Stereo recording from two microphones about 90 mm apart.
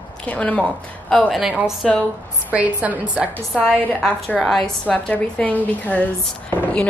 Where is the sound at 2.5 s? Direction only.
15° right (ahead or behind).